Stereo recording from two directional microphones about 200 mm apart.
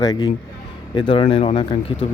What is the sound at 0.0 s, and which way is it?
Speech, 20° left (ahead or behind).